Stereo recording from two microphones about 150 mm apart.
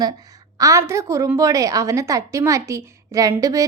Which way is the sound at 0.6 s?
20° right (ahead or behind).